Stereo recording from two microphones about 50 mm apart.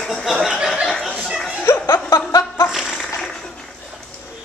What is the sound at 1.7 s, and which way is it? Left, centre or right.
Chuckle, left.